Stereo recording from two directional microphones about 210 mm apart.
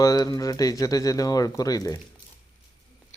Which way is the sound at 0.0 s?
20° left (ahead or behind).